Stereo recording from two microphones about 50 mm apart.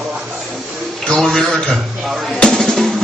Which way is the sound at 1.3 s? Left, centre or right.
Centre.